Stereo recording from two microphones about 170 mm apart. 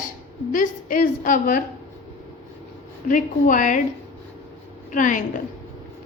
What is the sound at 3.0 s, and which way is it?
Speech, 50° left (ahead or behind).